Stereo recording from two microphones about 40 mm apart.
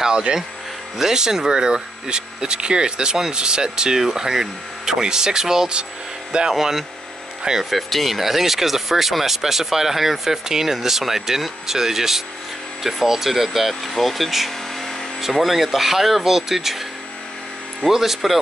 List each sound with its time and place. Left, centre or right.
0.0 s speech: centre
6.5 s speech: centre
17.8 s speech: centre